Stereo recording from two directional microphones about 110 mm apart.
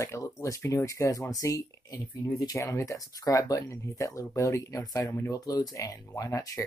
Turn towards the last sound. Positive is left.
turn(degrees=30)  # may be behind; listen again after turning